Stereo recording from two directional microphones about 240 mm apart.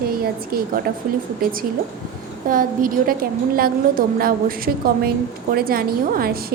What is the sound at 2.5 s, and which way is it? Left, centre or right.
A woman's voice, right.